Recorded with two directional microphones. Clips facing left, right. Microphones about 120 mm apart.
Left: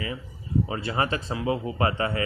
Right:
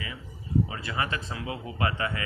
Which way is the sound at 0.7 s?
30° left (ahead or behind).